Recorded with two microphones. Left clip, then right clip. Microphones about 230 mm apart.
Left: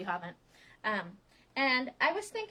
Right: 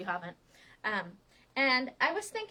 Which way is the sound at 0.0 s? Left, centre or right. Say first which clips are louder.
Even; centre.